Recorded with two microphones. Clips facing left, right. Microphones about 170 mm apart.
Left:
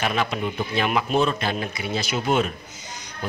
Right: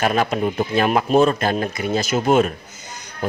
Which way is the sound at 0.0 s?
45° right (ahead or behind).